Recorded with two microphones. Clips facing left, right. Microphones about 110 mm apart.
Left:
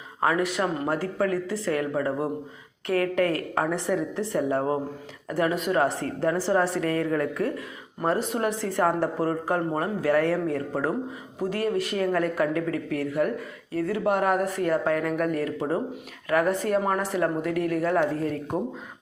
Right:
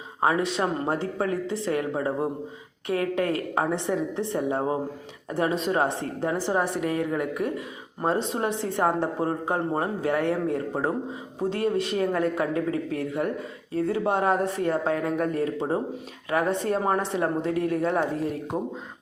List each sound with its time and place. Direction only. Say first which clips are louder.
0.2 s speech: even; 25° right (ahead or behind)